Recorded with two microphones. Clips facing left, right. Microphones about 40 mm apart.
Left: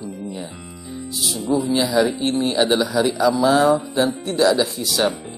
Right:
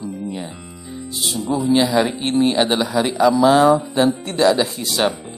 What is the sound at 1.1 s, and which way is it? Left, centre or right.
Speech, right.